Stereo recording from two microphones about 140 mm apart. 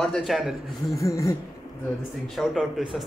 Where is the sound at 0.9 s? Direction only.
20° left (ahead or behind).